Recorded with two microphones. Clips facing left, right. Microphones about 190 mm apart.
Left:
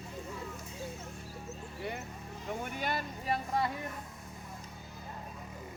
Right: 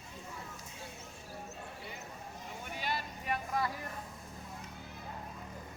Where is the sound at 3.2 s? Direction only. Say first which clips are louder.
Left 3 dB; 30° left (ahead or behind).